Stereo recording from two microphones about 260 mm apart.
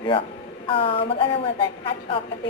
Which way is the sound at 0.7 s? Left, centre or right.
Left.